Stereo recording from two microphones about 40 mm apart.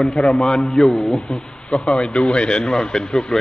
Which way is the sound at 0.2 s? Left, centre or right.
Centre.